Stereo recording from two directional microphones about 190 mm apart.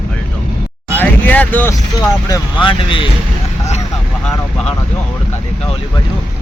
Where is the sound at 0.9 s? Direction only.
10° left (ahead or behind).